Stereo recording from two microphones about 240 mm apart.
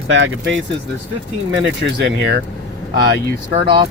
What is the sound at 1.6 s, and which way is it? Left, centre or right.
Speech, right.